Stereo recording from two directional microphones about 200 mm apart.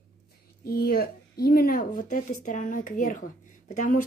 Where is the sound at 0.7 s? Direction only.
50° left (ahead or behind).